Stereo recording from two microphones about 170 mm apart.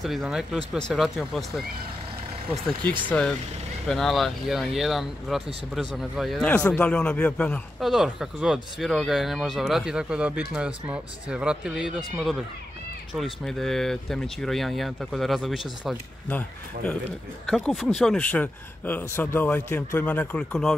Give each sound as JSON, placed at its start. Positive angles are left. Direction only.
{"t": 0.0, "sound": "speech", "side_deg": 0}
{"t": 2.8, "sound": "speech", "side_deg": -30}
{"t": 3.1, "sound": "speech", "side_deg": 5}
{"t": 13.1, "sound": "speech", "side_deg": 0}
{"t": 16.3, "sound": "speech", "side_deg": 10}